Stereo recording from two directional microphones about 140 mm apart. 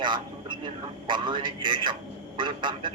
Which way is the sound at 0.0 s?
35° right (ahead or behind).